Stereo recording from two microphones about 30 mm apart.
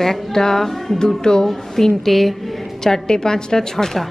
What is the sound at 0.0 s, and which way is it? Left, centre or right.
A woman's voice, centre.